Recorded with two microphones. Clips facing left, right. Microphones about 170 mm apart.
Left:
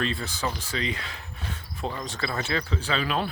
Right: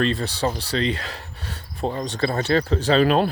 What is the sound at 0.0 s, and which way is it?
Speech, 40° right (ahead or behind).